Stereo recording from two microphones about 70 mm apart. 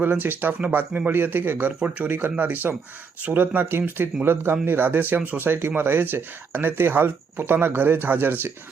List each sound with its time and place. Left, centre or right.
0.0 s speech: right